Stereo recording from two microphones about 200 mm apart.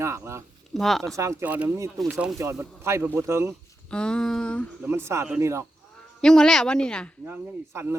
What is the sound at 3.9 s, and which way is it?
Speech, 5° left (ahead or behind).